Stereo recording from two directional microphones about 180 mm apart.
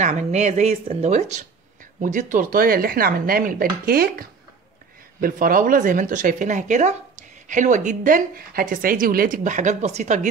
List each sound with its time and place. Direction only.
0.0 s speech: 40° right (ahead or behind)